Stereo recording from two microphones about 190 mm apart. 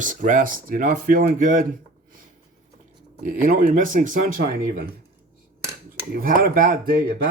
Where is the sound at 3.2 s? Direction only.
45° right (ahead or behind).